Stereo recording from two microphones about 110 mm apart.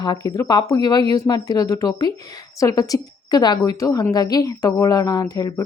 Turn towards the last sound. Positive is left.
turn(degrees=35)  # may be behind; listen again after turning